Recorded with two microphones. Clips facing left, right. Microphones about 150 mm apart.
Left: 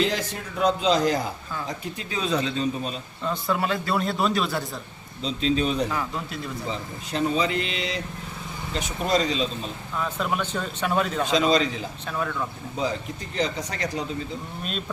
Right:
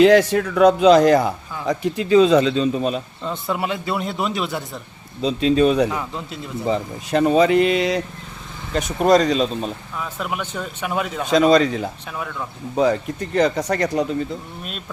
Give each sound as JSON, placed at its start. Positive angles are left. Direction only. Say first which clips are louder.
{"t": 0.0, "sound": "a man's voice", "louder": "right 13 dB", "side_deg": -75}
{"t": 3.2, "sound": "speech", "louder": "even", "side_deg": -20}
{"t": 5.2, "sound": "speech", "louder": "right 8 dB", "side_deg": -60}
{"t": 5.9, "sound": "speech", "louder": "right 2 dB", "side_deg": -20}
{"t": 6.7, "sound": "speech", "louder": "right 10 dB", "side_deg": -60}
{"t": 10.0, "sound": "a man's voice", "louder": "left 1 dB", "side_deg": -5}
{"t": 11.3, "sound": "speech", "louder": "right 10 dB", "side_deg": -50}